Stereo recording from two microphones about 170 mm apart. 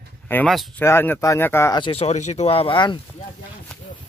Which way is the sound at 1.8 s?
35° left (ahead or behind).